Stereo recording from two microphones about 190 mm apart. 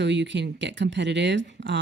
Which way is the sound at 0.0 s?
65° right (ahead or behind).